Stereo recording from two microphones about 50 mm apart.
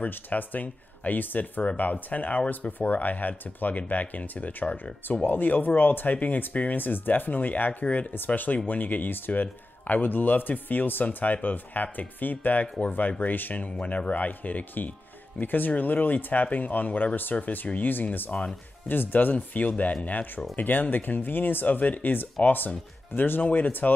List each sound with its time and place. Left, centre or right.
0.0 s speech: left